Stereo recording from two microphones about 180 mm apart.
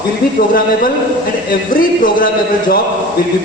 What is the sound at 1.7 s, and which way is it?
Speech, 50° left (ahead or behind).